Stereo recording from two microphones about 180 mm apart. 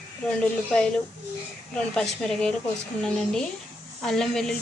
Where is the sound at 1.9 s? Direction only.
5° left (ahead or behind).